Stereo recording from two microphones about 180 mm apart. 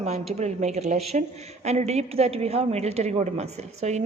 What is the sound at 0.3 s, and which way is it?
A woman's voice, 40° right (ahead or behind).